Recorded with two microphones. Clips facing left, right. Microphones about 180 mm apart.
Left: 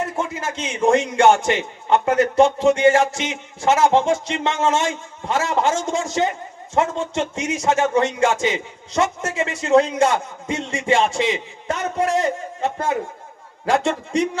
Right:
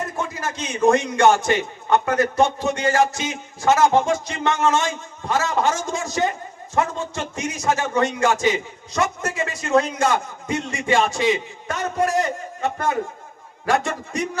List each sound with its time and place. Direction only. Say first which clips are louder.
0.0 s speech: left 2 dB; 25° left (ahead or behind)